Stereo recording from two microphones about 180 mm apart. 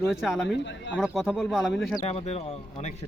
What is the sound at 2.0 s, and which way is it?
Speech, 35° left (ahead or behind).